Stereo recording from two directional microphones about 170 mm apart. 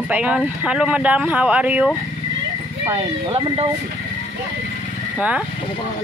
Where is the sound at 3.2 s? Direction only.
30° right (ahead or behind).